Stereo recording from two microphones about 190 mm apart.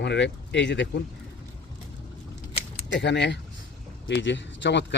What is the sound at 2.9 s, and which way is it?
Speech, 65° left (ahead or behind).